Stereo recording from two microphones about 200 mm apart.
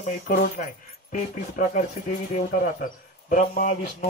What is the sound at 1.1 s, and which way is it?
Speech, 40° left (ahead or behind).